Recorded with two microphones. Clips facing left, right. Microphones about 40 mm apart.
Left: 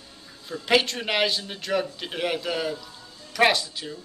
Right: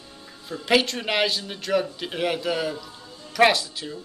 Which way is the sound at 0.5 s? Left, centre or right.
Centre.